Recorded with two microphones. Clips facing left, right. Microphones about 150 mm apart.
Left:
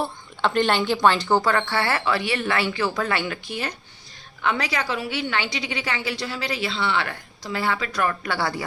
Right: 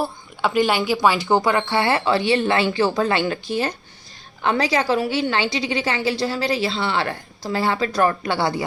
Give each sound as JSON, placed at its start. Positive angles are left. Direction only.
{"t": 0.0, "sound": "a woman's voice", "side_deg": -5}